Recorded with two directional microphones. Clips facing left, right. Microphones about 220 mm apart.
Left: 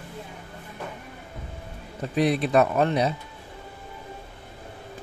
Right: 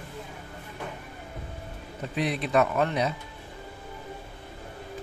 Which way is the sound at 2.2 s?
35° left (ahead or behind).